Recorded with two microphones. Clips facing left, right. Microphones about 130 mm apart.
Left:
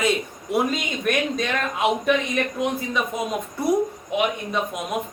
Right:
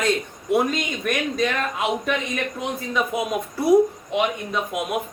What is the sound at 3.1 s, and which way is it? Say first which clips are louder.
Speech: right 2 dB; 5° right (ahead or behind).